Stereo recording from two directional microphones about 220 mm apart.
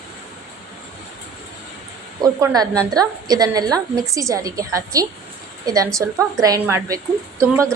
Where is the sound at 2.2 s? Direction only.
15° right (ahead or behind).